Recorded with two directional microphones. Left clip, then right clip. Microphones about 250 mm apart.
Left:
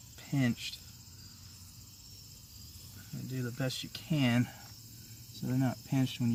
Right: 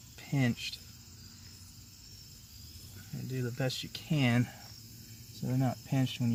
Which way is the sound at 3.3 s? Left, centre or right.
Right.